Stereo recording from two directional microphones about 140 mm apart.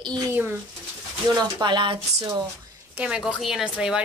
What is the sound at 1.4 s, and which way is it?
Speech, 30° right (ahead or behind).